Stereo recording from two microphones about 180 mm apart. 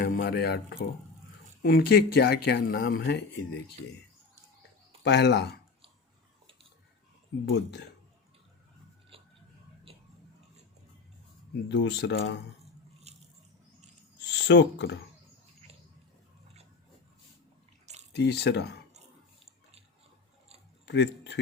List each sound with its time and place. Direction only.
0.0 s a man's voice: 55° left (ahead or behind)
5.0 s speech: 70° left (ahead or behind)
7.5 s speech: 70° left (ahead or behind)
9.9 s a sound: 30° right (ahead or behind)
11.7 s speech: 75° left (ahead or behind)
13.1 s a sound: 35° right (ahead or behind)
14.3 s speech: 75° left (ahead or behind)
18.1 s speech: 70° left (ahead or behind)
20.8 s a sound: 75° left (ahead or behind)